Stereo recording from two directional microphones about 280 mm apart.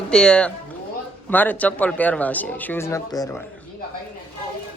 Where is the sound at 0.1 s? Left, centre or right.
Centre.